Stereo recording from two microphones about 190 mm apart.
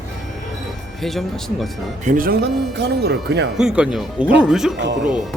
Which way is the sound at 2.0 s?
50° right (ahead or behind).